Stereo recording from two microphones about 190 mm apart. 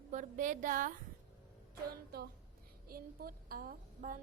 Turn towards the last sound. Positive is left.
turn(degrees=-45)  # may be behind; listen again after turning